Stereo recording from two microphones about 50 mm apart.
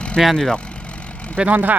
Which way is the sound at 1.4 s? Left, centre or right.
Right.